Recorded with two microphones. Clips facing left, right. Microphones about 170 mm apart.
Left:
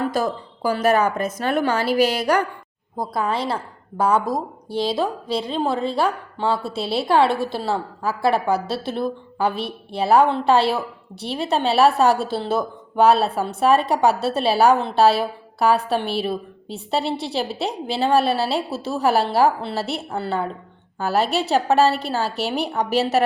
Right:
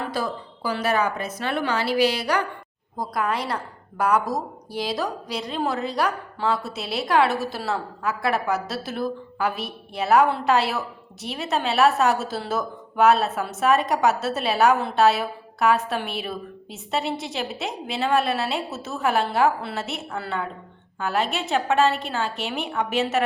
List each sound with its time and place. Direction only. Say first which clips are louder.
0.1 s speech: left 5 dB; 45° left (ahead or behind)
3.0 s a woman's voice: left 2 dB; 25° left (ahead or behind)